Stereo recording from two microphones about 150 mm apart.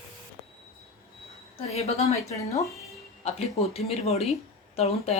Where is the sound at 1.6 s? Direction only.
45° left (ahead or behind).